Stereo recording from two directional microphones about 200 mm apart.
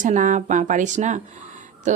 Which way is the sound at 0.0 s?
40° right (ahead or behind).